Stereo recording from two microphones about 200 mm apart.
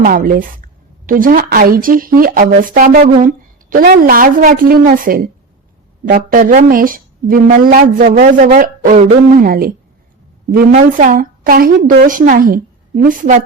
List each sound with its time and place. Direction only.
0.0 s a woman's voice: 45° right (ahead or behind)